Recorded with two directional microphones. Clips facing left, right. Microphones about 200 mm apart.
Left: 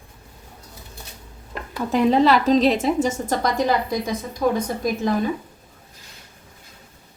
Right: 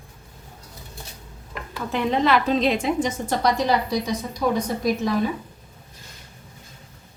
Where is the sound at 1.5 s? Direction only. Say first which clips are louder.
Left 5 dB; 35° left (ahead or behind).